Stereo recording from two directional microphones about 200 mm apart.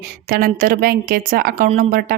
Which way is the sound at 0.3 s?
45° right (ahead or behind).